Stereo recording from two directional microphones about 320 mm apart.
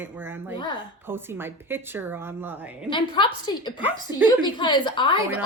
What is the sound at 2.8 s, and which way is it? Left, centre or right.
Speech, centre.